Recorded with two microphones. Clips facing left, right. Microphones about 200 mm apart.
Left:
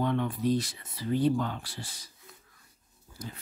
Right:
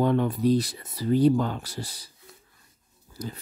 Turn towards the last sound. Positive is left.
turn(degrees=-40)  # may be behind; listen again after turning